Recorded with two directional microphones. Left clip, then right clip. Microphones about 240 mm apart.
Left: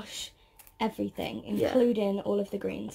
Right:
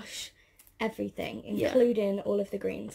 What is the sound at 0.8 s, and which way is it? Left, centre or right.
Speech, centre.